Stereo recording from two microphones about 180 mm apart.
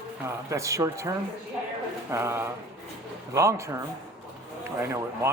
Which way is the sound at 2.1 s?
15° right (ahead or behind).